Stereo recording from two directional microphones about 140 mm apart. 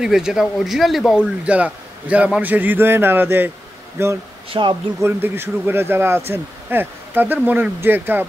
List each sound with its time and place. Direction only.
0.0 s speech: 5° right (ahead or behind)
4.5 s speech: 35° right (ahead or behind)
5.0 s speech: 15° right (ahead or behind)